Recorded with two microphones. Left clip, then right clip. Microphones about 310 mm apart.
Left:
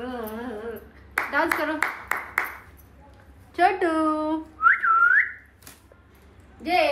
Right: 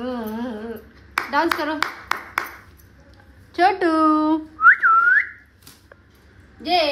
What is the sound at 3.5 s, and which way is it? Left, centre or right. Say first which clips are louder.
Whistling: right 4 dB; right.